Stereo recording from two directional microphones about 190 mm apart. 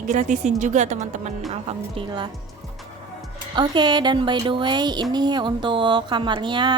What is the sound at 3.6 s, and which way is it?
A woman's voice, 25° right (ahead or behind).